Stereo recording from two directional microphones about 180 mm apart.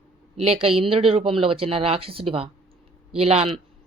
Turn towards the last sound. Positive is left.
turn(degrees=-35)  # may be behind; listen again after turning